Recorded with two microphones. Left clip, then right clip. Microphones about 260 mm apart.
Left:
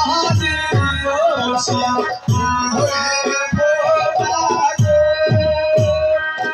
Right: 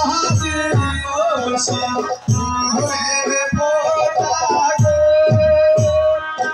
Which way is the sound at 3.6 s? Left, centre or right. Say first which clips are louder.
Left 2 dB; left.